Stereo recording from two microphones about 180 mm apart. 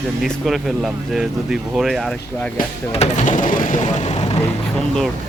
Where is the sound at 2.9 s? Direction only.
40° left (ahead or behind).